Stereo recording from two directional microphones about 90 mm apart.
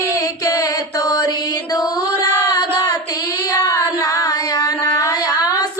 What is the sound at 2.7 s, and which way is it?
Child singing, 45° left (ahead or behind).